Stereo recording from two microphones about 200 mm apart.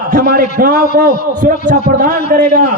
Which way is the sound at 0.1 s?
45° right (ahead or behind).